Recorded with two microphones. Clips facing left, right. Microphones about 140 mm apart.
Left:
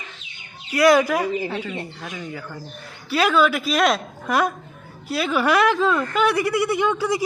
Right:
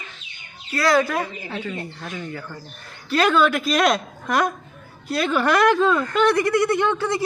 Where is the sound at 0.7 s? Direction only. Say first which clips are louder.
Left 3 dB; 20° left (ahead or behind).